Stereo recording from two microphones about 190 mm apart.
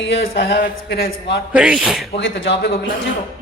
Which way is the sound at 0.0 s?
65° left (ahead or behind).